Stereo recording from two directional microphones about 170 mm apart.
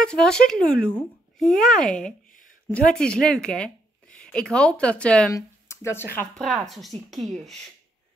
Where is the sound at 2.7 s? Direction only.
5° left (ahead or behind).